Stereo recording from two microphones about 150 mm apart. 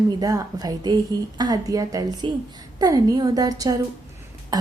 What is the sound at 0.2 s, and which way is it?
A woman's voice, 25° right (ahead or behind).